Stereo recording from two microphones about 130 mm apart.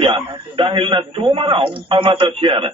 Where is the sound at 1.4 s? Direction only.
40° right (ahead or behind).